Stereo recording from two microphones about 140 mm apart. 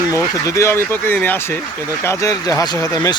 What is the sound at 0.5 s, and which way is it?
Speech, 20° left (ahead or behind).